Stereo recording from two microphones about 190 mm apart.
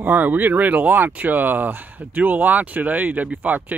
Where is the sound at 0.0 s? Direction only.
10° right (ahead or behind).